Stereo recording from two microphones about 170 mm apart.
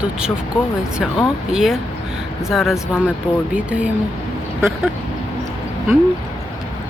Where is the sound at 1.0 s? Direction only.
Centre (ahead or behind).